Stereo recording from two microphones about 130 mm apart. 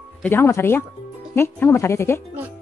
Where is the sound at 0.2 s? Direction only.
15° left (ahead or behind).